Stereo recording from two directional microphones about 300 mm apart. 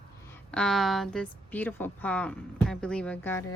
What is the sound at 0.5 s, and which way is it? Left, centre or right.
A woman's voice, centre.